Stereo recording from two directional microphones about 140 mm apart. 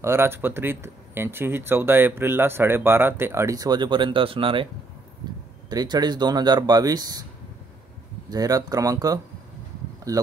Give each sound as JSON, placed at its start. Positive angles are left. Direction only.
{"t": 0.0, "sound": "speech", "side_deg": -15}
{"t": 5.2, "sound": "a sound", "side_deg": -30}
{"t": 5.7, "sound": "speech", "side_deg": -30}
{"t": 8.3, "sound": "speech", "side_deg": -25}